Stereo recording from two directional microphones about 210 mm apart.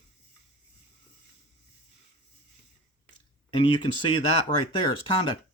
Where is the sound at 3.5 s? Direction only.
25° left (ahead or behind).